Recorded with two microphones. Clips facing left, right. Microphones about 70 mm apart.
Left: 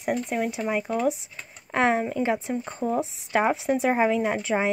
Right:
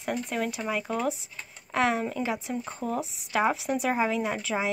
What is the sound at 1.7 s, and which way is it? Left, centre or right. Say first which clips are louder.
Speech: left 3 dB; left.